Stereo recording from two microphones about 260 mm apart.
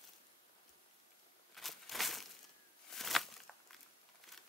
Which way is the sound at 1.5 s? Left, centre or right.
Centre.